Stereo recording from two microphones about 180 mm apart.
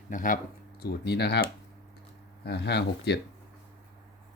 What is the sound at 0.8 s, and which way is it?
Speech, 65° left (ahead or behind).